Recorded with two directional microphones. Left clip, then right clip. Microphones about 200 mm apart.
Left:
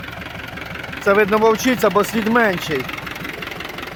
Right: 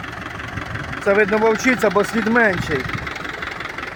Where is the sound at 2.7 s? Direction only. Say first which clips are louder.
Right 1 dB; 65° left (ahead or behind).